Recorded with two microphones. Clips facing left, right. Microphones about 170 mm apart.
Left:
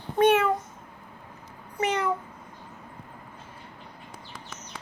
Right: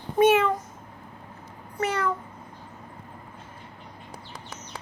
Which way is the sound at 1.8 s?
15° left (ahead or behind).